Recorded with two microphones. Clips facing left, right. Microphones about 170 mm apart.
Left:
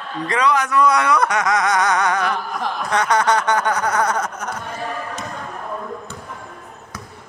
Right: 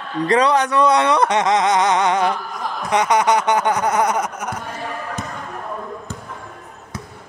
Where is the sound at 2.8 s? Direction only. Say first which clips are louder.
Right 2 dB; 15° right (ahead or behind).